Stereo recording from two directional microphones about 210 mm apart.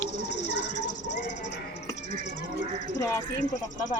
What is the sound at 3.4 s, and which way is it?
Speech, 35° left (ahead or behind).